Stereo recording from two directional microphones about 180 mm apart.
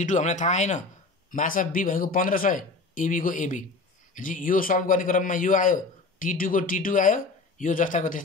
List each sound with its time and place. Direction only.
0.0 s a man's voice: 40° left (ahead or behind)